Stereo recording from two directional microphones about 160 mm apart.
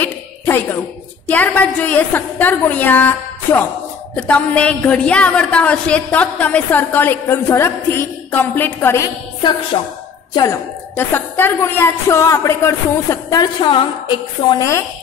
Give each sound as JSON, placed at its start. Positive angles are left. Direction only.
{"t": 0.0, "sound": "a sound", "side_deg": 10}
{"t": 1.2, "sound": "a woman's voice", "side_deg": 10}
{"t": 4.1, "sound": "a woman's voice", "side_deg": 5}
{"t": 9.4, "sound": "music", "side_deg": 30}
{"t": 10.3, "sound": "a woman's voice", "side_deg": 20}